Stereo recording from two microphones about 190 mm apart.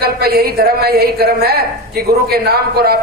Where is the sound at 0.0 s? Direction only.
55° right (ahead or behind).